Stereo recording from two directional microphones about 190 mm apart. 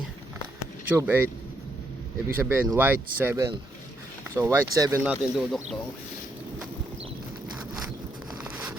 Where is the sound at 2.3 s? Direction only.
10° right (ahead or behind).